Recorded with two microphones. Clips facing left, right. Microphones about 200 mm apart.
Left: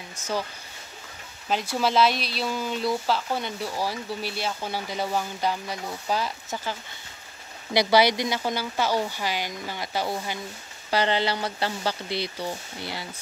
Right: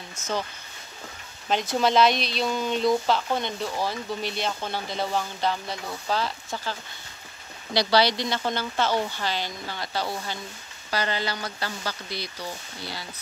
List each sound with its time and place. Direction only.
0.1 s speech: 10° left (ahead or behind)
1.5 s speech: 5° left (ahead or behind)
10.9 s speech: 25° left (ahead or behind)